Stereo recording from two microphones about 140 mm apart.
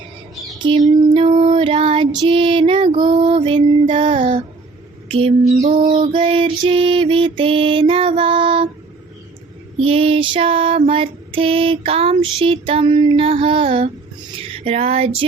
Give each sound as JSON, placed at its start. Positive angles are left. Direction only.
{"t": 0.6, "sound": "a sound", "side_deg": -35}
{"t": 1.4, "sound": "child singing", "side_deg": -35}
{"t": 5.0, "sound": "speech", "side_deg": -40}
{"t": 5.6, "sound": "bird", "side_deg": -70}
{"t": 6.0, "sound": "music", "side_deg": -40}
{"t": 9.7, "sound": "female singing", "side_deg": -40}
{"t": 14.3, "sound": "a sound", "side_deg": -40}